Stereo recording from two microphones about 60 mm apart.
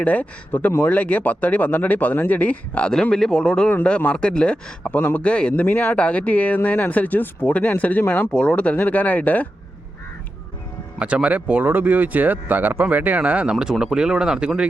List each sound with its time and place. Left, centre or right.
0.0 s speech: left
2.9 s a man's voice: centre
4.9 s a man's voice: left
5.2 s speech: left
11.0 s speech: right